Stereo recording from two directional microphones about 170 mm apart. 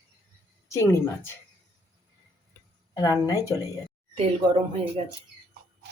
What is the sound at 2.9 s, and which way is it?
Speech, 20° left (ahead or behind).